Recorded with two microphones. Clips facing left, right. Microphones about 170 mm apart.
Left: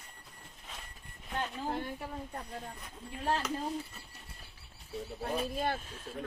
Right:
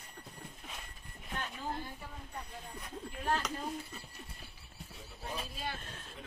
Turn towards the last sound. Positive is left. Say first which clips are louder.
# left 8 dB
turn(degrees=55)  # may be behind; listen again after turning